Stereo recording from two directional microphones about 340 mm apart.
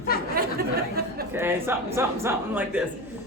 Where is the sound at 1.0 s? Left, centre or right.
Right.